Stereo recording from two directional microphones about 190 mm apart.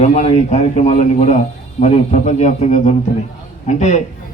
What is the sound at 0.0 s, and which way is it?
A man's voice, 40° left (ahead or behind).